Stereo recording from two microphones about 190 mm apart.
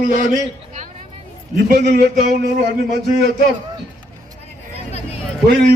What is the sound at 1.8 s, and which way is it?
A man's voice, 60° right (ahead or behind).